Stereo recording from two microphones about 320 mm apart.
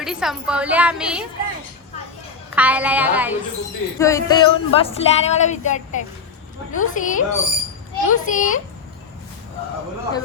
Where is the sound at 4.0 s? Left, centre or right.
Centre.